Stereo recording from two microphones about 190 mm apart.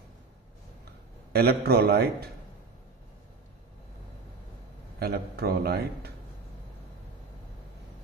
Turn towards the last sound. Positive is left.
turn(degrees=-55)  # may be behind; listen again after turning